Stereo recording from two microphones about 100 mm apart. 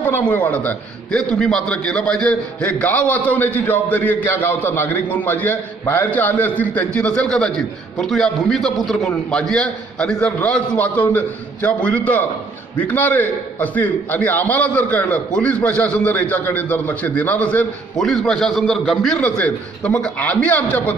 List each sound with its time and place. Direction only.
0.2 s a man's voice: 15° left (ahead or behind)